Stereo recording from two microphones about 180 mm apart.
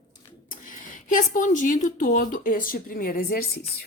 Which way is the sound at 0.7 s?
45° left (ahead or behind).